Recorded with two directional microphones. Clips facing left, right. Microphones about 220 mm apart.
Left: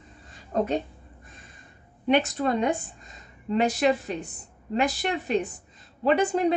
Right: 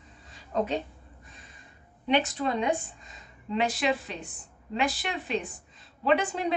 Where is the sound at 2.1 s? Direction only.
50° left (ahead or behind).